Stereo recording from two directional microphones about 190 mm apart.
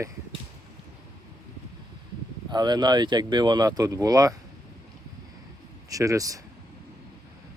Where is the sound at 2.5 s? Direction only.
20° right (ahead or behind).